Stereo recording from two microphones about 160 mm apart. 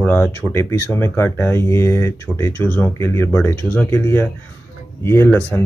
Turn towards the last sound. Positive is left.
turn(degrees=15)  # may be behind; listen again after turning